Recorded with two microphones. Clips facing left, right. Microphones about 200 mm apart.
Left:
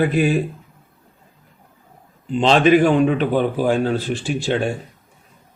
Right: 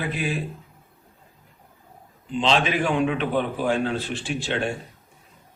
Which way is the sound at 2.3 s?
45° left (ahead or behind).